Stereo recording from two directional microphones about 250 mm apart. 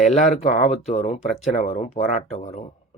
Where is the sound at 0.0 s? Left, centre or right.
Left.